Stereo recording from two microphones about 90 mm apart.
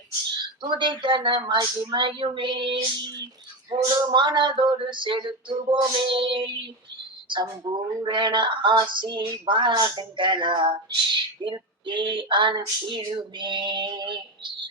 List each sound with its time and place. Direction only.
0.3 s speech: 60° right (ahead or behind)
3.7 s speech: 55° right (ahead or behind)